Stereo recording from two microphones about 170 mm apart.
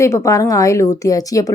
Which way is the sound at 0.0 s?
15° left (ahead or behind).